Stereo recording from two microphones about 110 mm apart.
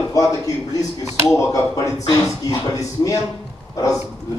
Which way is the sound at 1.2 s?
30° left (ahead or behind).